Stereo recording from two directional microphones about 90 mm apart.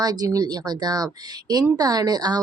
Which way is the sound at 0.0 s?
45° right (ahead or behind).